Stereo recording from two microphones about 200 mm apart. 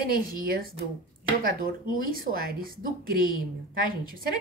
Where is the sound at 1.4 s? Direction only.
45° right (ahead or behind).